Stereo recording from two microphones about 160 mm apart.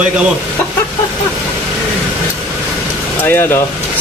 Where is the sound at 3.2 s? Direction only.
15° left (ahead or behind).